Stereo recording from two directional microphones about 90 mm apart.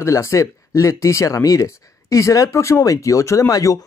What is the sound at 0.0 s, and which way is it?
Speech, 35° left (ahead or behind).